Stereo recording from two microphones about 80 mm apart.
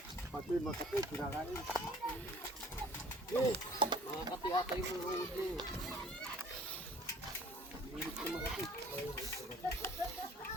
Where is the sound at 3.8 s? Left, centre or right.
Right.